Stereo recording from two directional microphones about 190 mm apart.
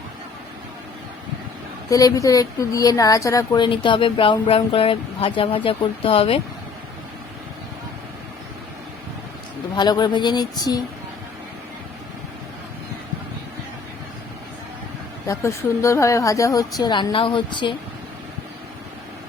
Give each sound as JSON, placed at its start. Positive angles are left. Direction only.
{"t": 1.9, "sound": "a woman's voice", "side_deg": 20}
{"t": 9.7, "sound": "a woman's voice", "side_deg": 20}
{"t": 15.3, "sound": "a woman's voice", "side_deg": 15}